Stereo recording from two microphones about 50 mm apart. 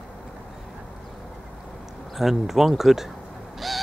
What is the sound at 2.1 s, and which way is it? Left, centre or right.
Speech, centre.